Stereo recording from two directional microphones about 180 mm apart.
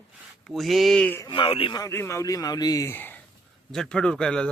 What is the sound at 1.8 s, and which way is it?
A man's voice, 15° left (ahead or behind).